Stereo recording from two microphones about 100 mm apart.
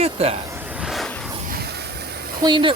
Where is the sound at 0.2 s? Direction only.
90° right.